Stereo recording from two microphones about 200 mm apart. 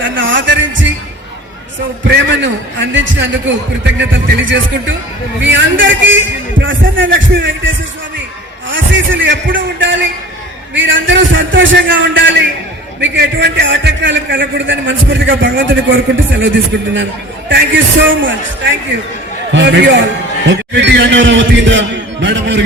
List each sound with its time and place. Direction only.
0.0 s music: 70° right (ahead or behind)
2.0 s a man's voice: 65° right (ahead or behind)
8.7 s a man's voice: 65° right (ahead or behind)
17.5 s a man's voice: 65° right (ahead or behind)